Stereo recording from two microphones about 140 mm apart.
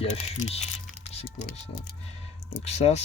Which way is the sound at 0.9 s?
50° left (ahead or behind).